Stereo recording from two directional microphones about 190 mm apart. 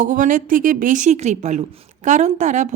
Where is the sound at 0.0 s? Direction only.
45° right (ahead or behind).